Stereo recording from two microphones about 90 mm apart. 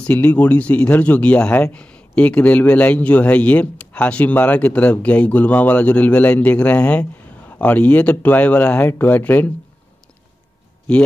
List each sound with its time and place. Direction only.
0.0 s speech: 15° left (ahead or behind)